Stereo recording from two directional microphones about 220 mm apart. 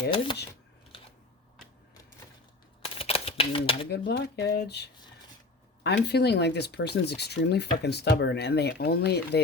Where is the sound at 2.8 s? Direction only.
25° left (ahead or behind).